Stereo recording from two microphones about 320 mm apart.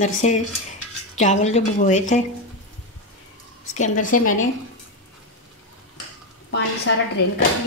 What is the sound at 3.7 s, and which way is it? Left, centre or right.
Speech, left.